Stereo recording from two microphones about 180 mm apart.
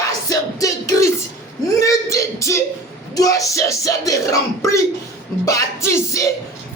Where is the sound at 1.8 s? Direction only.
15° left (ahead or behind).